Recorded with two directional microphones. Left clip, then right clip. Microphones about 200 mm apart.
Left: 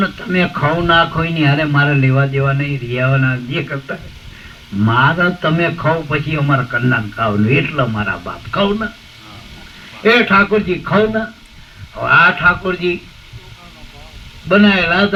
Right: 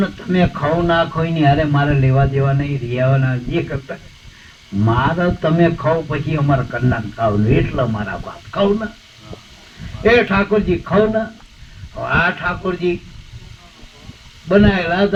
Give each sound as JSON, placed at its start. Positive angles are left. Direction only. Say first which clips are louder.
{"t": 0.0, "sound": "speech", "louder": "left 2 dB", "side_deg": -35}
{"t": 10.0, "sound": "speech", "louder": "left 3 dB", "side_deg": -35}
{"t": 14.4, "sound": "speech", "louder": "left 3 dB", "side_deg": -35}